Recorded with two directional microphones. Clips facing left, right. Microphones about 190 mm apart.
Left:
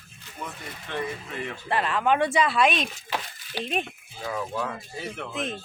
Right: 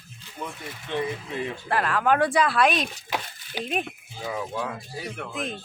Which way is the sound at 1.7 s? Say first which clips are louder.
Right 1 dB; centre (ahead or behind).